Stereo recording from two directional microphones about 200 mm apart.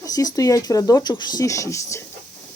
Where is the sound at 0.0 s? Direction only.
15° left (ahead or behind).